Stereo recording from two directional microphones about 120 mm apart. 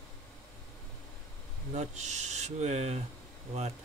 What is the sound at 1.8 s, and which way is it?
Speech, 75° right (ahead or behind).